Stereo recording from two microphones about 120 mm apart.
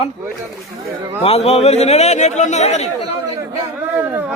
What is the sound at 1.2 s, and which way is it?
Speech, 55° left (ahead or behind).